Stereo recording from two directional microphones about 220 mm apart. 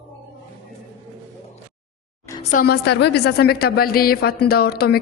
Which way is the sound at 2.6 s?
45° left (ahead or behind).